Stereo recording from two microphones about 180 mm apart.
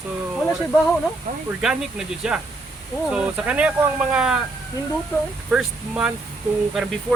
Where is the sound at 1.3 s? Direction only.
55° right (ahead or behind).